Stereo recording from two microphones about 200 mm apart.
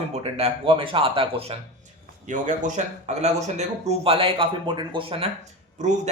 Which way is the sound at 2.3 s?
40° right (ahead or behind).